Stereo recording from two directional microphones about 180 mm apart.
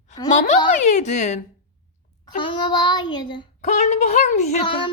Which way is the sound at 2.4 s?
25° left (ahead or behind).